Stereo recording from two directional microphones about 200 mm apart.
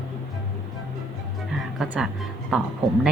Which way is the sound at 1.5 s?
Centre (ahead or behind).